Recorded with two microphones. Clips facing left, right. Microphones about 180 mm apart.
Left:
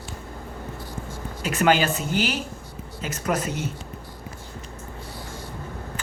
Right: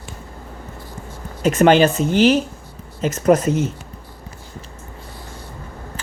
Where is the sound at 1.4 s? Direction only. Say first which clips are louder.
Right 8 dB; 45° right (ahead or behind).